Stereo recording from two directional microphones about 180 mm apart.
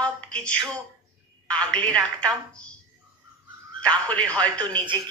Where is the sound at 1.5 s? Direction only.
5° left (ahead or behind).